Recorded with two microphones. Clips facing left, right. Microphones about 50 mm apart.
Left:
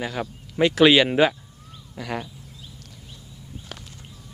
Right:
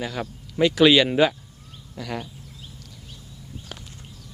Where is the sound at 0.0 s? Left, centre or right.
Centre.